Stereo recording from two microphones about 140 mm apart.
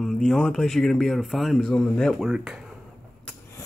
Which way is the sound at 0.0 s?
5° left (ahead or behind).